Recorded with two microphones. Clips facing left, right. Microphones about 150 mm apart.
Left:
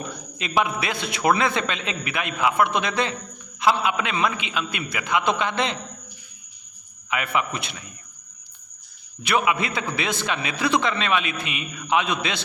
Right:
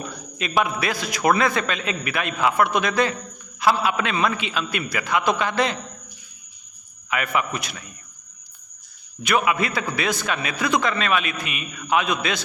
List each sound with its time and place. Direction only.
0.3 s a man's voice: 20° left (ahead or behind)
7.1 s a man's voice: 20° left (ahead or behind)
9.2 s a man's voice: 25° left (ahead or behind)